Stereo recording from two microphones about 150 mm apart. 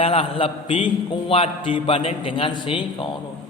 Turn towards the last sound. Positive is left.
turn(degrees=35)  # may be behind; listen again after turning